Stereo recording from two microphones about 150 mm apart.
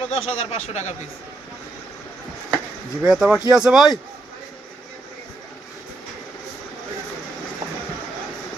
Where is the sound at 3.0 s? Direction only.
5° right (ahead or behind).